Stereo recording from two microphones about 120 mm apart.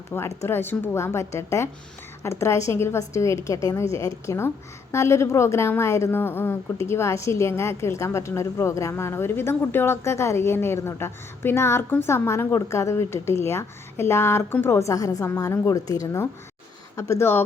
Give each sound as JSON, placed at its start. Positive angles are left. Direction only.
{"t": 0.1, "sound": "a woman's voice", "side_deg": 20}
{"t": 17.0, "sound": "a woman's voice", "side_deg": 20}